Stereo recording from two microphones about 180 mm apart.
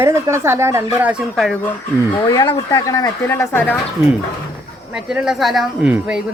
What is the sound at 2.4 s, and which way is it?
Speech, 20° left (ahead or behind).